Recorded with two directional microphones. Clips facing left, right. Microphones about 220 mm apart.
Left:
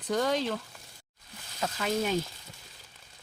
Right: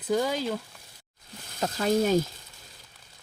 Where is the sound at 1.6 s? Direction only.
40° right (ahead or behind).